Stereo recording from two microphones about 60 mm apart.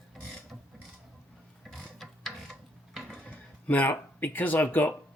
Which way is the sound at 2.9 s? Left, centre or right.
Centre.